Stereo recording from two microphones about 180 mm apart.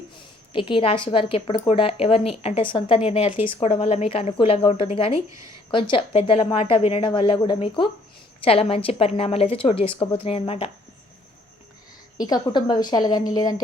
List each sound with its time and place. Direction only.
0.5 s a woman's voice: 30° left (ahead or behind)
5.3 s speech: 20° right (ahead or behind)
5.7 s a woman's voice: 30° left (ahead or behind)
12.1 s a woman's voice: 20° left (ahead or behind)